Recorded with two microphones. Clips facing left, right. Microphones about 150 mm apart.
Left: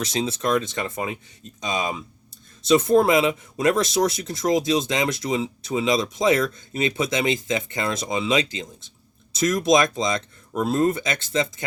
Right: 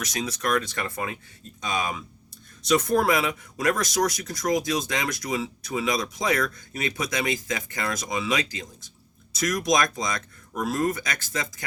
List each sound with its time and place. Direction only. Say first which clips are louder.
0.0 s speech: left 4 dB; 25° left (ahead or behind)